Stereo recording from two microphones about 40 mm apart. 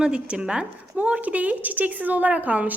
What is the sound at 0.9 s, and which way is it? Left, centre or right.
A woman's voice, right.